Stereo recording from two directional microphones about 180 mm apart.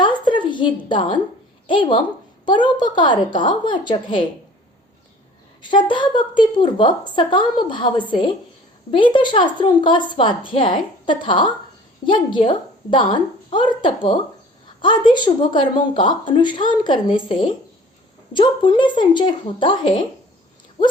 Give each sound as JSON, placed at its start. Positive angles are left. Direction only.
{"t": 0.0, "sound": "a sound", "side_deg": 25}
{"t": 1.6, "sound": "speech", "side_deg": 25}
{"t": 5.7, "sound": "speech", "side_deg": 25}